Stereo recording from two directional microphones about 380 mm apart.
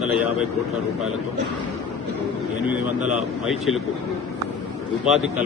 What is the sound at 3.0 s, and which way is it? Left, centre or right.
Speech, centre.